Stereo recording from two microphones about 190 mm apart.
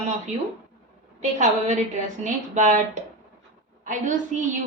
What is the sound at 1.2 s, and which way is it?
A woman's voice, 40° right (ahead or behind).